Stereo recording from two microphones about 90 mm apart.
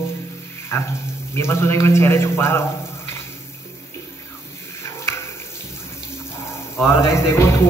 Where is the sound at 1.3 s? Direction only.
30° left (ahead or behind).